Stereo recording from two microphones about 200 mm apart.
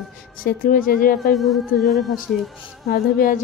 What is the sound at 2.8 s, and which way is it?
Speech, 45° left (ahead or behind).